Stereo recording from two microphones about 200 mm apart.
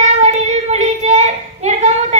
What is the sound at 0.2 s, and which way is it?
Child singing, 35° right (ahead or behind).